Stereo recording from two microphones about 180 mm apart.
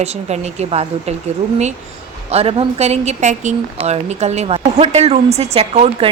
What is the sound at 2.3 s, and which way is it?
A woman's voice, 35° right (ahead or behind).